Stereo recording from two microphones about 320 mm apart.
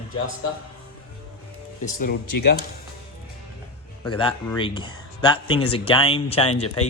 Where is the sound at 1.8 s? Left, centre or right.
Left.